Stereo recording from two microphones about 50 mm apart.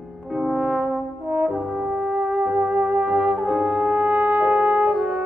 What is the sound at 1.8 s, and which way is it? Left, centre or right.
Brass instrument, right.